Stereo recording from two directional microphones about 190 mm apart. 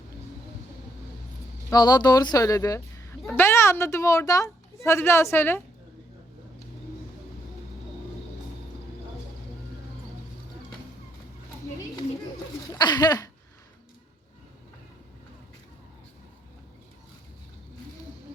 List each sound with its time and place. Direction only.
1.7 s a woman's voice: 20° left (ahead or behind)
12.7 s speech: 20° left (ahead or behind)